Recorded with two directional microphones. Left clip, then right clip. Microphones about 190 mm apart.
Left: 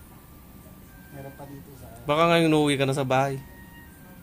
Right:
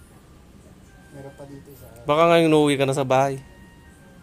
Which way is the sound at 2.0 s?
20° right (ahead or behind).